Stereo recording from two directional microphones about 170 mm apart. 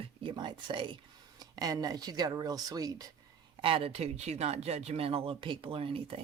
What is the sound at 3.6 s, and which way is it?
Speech, 35° right (ahead or behind).